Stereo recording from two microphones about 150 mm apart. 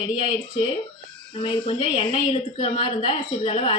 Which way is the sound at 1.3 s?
40° left (ahead or behind).